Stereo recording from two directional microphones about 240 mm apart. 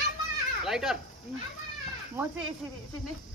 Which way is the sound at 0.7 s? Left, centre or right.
Centre.